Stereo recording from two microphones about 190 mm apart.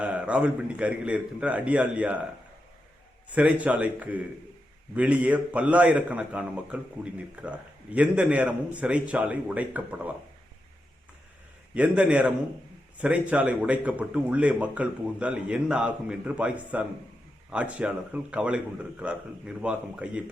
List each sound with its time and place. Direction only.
0.0 s speech: 5° right (ahead or behind)
3.3 s speech: 5° right (ahead or behind)
11.7 s speech: 5° right (ahead or behind)